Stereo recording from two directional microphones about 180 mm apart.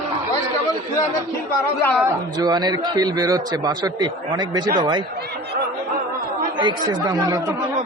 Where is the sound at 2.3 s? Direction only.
20° right (ahead or behind).